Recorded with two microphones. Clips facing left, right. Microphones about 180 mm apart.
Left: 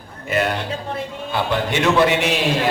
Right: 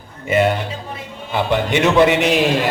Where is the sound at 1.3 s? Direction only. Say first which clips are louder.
Right 3 dB; 15° right (ahead or behind).